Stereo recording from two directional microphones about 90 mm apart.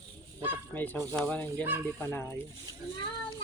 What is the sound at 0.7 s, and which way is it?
Speech, 20° left (ahead or behind).